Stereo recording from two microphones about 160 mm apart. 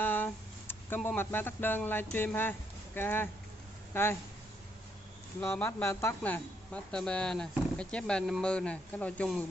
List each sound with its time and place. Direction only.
0.0 s speech: 10° left (ahead or behind)
5.4 s a man's voice: 15° left (ahead or behind)